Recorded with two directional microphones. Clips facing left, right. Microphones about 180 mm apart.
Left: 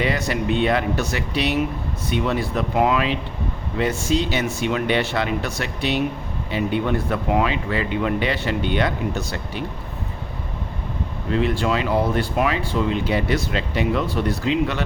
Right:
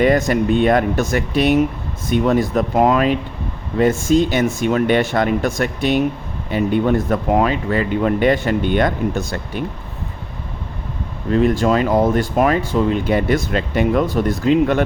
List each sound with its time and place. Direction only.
0.0 s speech: 50° right (ahead or behind)
11.3 s speech: 45° right (ahead or behind)